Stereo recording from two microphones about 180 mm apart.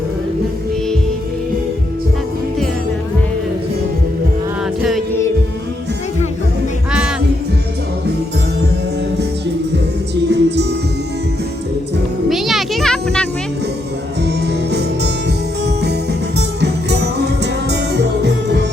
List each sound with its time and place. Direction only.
4.8 s music: centre (ahead or behind)
10.2 s music: 70° right (ahead or behind)
12.3 s a sound: centre (ahead or behind)
14.7 s music: 70° right (ahead or behind)
16.6 s music: 70° right (ahead or behind)